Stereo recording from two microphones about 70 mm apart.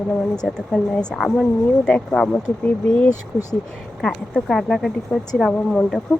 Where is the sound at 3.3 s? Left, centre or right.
Right.